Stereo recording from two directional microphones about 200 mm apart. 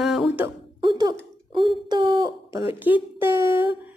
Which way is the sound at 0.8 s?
20° right (ahead or behind).